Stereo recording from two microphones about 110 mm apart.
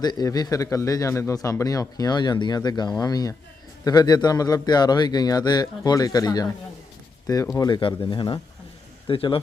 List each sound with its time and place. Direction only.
0.0 s a man's voice: 40° left (ahead or behind)